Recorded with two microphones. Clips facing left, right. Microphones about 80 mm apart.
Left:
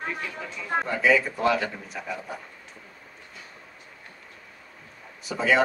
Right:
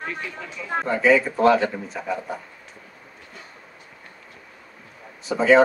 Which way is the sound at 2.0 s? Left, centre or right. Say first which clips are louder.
Right 3 dB; centre.